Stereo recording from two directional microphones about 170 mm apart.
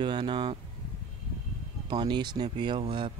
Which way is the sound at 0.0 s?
30° right (ahead or behind).